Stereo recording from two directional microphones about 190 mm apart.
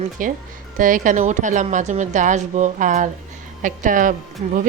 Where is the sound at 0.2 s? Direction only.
45° right (ahead or behind).